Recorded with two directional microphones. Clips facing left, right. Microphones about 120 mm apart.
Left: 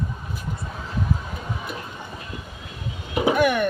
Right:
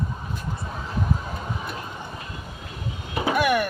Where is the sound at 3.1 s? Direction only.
20° left (ahead or behind).